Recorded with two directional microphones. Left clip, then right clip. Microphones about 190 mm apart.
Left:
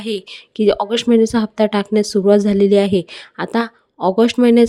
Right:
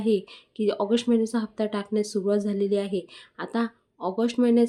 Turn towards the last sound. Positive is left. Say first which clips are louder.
# left 10 dB
turn(degrees=50)  # may be behind; listen again after turning